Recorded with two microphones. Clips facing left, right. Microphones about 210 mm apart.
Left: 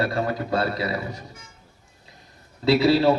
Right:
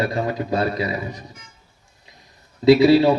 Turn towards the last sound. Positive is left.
turn(degrees=-15)  # may be behind; listen again after turning